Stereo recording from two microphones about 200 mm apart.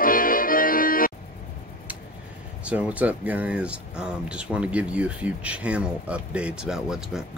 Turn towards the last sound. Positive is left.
turn(degrees=-5)  # may be behind; listen again after turning